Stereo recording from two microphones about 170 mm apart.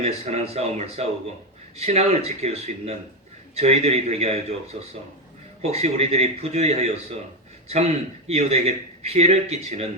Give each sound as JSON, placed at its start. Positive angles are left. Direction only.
{"t": 0.0, "sound": "a man's voice", "side_deg": -40}